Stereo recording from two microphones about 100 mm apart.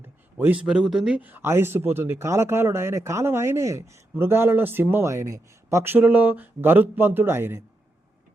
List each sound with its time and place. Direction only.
0.3 s speech: 20° right (ahead or behind)
0.6 s speech: 5° right (ahead or behind); by 7.6 s 25° right (ahead or behind)